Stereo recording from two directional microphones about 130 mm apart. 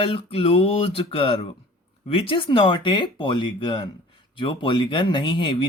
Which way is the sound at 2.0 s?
45° left (ahead or behind).